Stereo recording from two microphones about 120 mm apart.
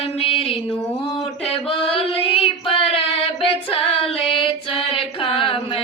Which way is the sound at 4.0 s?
50° left (ahead or behind).